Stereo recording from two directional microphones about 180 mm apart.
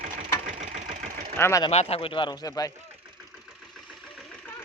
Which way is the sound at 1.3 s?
15° left (ahead or behind).